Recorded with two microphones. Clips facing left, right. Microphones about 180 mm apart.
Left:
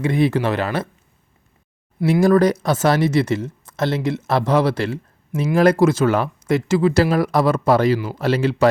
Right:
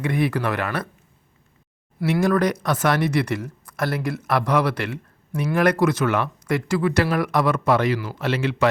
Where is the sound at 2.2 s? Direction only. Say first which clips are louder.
Left 6 dB; 30° left (ahead or behind).